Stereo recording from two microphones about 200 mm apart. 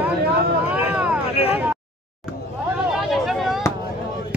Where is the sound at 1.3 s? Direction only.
30° left (ahead or behind).